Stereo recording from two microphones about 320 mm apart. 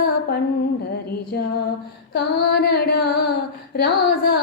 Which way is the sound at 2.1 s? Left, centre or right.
Left.